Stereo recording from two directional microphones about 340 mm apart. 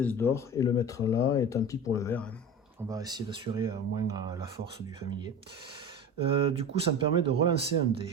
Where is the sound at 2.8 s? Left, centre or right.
Centre.